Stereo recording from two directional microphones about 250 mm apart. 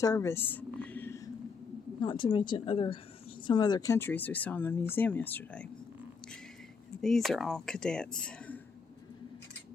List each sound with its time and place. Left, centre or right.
0.0 s a sound: centre
2.0 s a woman's voice: centre
7.0 s speech: centre